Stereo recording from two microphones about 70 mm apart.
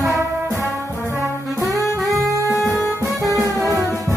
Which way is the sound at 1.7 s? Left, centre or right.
Right.